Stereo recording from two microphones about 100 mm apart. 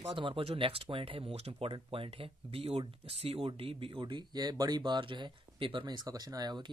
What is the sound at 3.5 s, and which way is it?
Speech, 65° right (ahead or behind).